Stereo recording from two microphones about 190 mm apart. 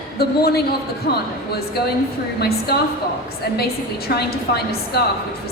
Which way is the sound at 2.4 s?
55° left (ahead or behind).